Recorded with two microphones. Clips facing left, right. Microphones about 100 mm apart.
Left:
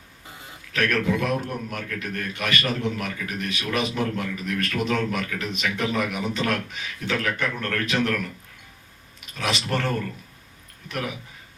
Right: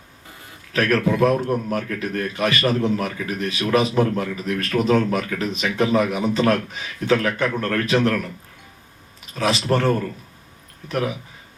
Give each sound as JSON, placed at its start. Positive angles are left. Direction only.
{"t": 0.7, "sound": "a man's voice", "side_deg": -35}
{"t": 9.3, "sound": "a man's voice", "side_deg": -35}